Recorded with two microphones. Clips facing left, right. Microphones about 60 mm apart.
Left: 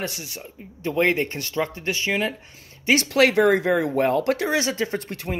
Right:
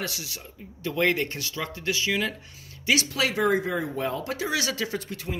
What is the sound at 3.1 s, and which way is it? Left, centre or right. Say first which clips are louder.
Speech: left 7 dB; left.